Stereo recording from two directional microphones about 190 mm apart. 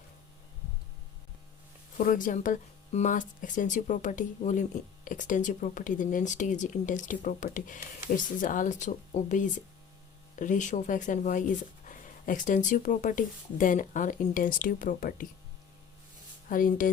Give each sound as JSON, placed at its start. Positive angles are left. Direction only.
{"t": 2.0, "sound": "speech", "side_deg": 45}
{"t": 16.5, "sound": "speech", "side_deg": 45}